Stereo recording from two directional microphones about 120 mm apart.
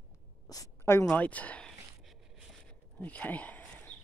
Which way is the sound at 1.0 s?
10° left (ahead or behind).